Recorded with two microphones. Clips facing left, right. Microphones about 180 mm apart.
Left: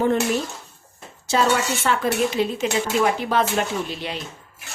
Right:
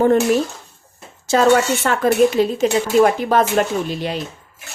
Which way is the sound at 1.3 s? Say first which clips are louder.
Right 6 dB; 50° right (ahead or behind).